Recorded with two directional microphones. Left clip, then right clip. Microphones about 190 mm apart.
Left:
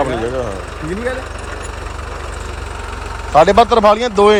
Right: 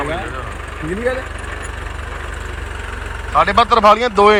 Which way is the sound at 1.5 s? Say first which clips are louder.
Left 1 dB; 40° left (ahead or behind).